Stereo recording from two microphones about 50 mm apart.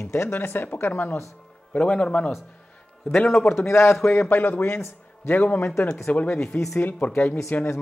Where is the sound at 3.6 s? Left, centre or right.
Left.